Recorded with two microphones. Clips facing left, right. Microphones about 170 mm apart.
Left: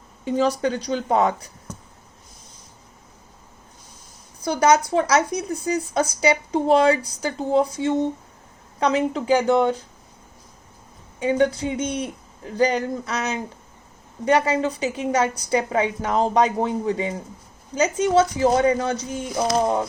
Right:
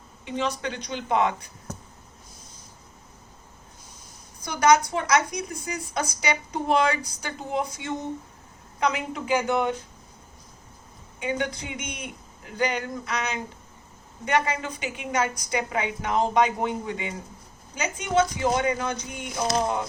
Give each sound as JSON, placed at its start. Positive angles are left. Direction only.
{"t": 0.3, "sound": "speech", "side_deg": 40}
{"t": 4.4, "sound": "speech", "side_deg": 30}
{"t": 11.2, "sound": "speech", "side_deg": 35}